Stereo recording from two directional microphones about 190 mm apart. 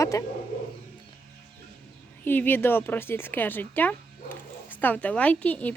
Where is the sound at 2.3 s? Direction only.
10° left (ahead or behind).